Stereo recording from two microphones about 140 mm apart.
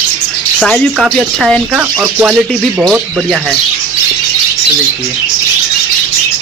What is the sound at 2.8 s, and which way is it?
Speech, centre (ahead or behind).